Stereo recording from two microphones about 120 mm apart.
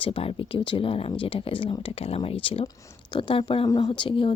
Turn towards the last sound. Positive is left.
turn(degrees=45)  # may be behind; listen again after turning